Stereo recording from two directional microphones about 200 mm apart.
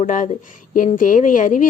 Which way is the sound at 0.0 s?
40° left (ahead or behind).